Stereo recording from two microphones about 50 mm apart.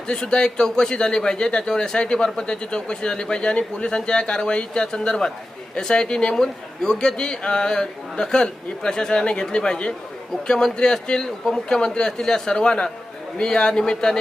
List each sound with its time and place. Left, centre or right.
0.1 s speech: centre